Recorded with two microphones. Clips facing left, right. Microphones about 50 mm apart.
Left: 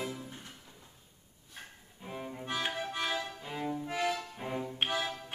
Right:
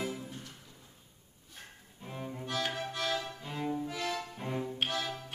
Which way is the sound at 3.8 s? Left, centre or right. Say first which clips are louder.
Left 4 dB; centre.